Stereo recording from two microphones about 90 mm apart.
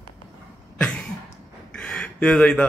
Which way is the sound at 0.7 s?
10° left (ahead or behind).